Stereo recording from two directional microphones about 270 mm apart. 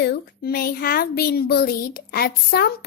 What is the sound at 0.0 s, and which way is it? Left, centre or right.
A woman's voice, left.